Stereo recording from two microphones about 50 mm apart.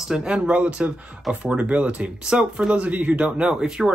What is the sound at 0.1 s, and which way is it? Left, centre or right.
Speech, centre.